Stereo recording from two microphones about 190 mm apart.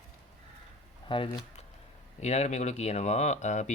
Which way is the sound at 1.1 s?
25° left (ahead or behind).